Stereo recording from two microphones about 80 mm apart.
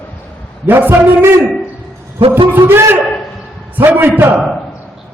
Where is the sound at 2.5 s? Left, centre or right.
Right.